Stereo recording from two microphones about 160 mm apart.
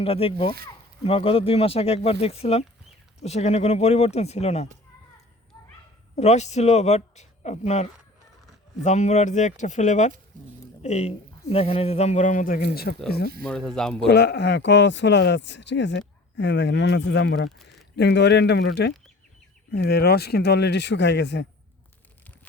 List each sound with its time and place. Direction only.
0.0 s speech: 35° left (ahead or behind)
6.1 s speech: 45° left (ahead or behind); by 13.0 s 85° left
13.4 s speech: 5° left (ahead or behind)
14.1 s a man's voice: 90° left